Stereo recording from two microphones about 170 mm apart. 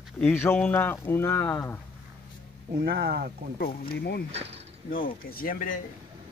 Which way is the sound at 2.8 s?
70° right (ahead or behind).